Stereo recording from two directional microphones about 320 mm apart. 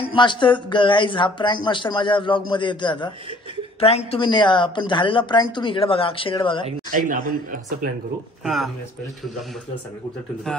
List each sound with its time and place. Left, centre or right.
0.0 s speech: centre
6.9 s a man's voice: right
8.5 s speech: centre